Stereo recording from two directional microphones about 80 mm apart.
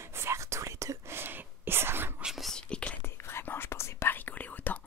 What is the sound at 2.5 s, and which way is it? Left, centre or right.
Whispering, centre.